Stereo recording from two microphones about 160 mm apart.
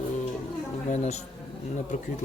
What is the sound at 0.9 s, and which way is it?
Speech, 45° left (ahead or behind).